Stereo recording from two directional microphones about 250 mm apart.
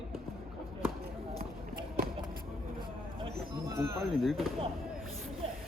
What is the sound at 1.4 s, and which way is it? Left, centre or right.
Run, right.